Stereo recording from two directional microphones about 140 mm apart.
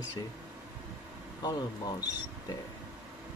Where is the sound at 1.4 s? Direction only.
30° left (ahead or behind).